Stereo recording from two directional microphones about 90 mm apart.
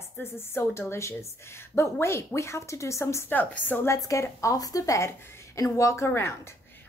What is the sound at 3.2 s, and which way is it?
Speech, 20° left (ahead or behind).